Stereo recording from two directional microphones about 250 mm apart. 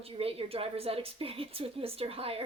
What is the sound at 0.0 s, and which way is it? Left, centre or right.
A woman's voice, right.